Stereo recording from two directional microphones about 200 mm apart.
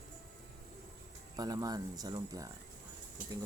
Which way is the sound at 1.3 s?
20° right (ahead or behind).